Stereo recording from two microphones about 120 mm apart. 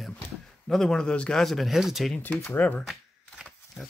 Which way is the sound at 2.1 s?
15° left (ahead or behind).